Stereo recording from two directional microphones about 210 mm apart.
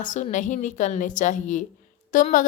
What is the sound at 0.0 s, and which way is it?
A woman's voice, 35° left (ahead or behind).